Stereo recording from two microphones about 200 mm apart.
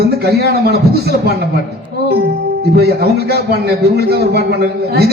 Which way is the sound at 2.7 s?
50° right (ahead or behind).